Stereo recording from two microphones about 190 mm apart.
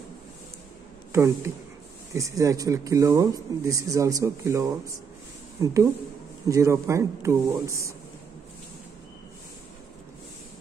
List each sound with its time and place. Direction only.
1.1 s speech: 15° right (ahead or behind)